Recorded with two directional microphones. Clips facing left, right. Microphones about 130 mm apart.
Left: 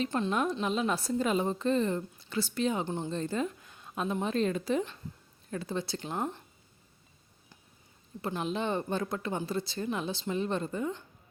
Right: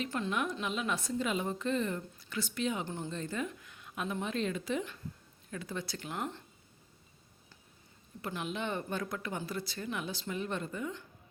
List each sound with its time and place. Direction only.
0.0 s speech: 35° left (ahead or behind)
2.8 s speech: 20° left (ahead or behind)
3.1 s speech: 35° left (ahead or behind)
8.2 s speech: 30° left (ahead or behind)